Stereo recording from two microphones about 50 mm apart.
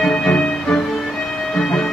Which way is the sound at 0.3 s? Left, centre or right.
Left.